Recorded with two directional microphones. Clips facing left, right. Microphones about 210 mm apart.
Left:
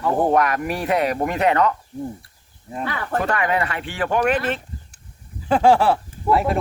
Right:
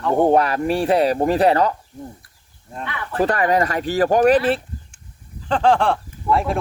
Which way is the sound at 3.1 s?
35° right (ahead or behind).